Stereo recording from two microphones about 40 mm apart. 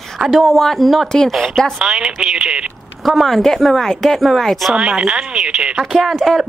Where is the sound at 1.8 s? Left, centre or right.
Centre.